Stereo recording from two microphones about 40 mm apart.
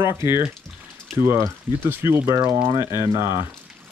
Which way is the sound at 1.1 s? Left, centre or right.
Right.